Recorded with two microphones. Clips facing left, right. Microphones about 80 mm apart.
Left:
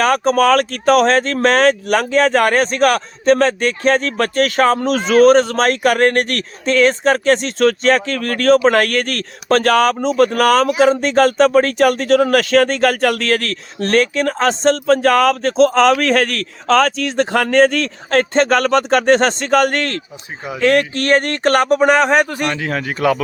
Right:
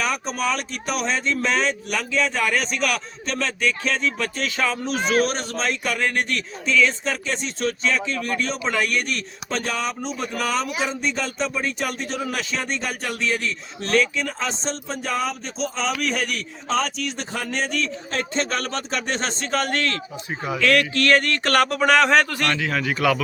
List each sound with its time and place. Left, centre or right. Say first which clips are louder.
0.0 s speech: left 11 dB; left
2.6 s speech: left 10 dB; left
5.2 s speech: left 15 dB; left
5.5 s speech: left 11 dB; left
13.8 s speech: left 6 dB; left
20.6 s speech: left 5 dB; left
22.6 s a man's voice: left 5 dB; left